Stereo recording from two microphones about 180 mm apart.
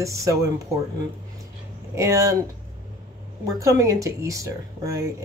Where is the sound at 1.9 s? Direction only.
15° right (ahead or behind).